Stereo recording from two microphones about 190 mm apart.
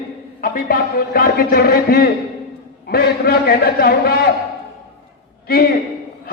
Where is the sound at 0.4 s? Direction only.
50° left (ahead or behind).